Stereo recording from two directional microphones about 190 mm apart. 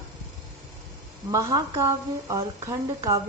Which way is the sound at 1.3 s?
15° right (ahead or behind).